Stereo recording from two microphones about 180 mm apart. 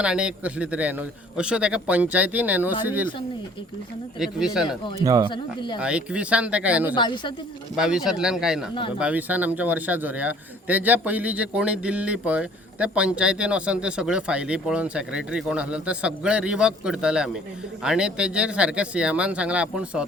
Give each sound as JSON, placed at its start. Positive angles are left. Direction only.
{"t": 0.0, "sound": "a man's voice", "side_deg": -5}
{"t": 4.2, "sound": "a man's voice", "side_deg": -5}
{"t": 4.9, "sound": "speech", "side_deg": -20}
{"t": 5.8, "sound": "a man's voice", "side_deg": -5}
{"t": 6.9, "sound": "speech", "side_deg": 25}
{"t": 7.8, "sound": "a man's voice", "side_deg": -5}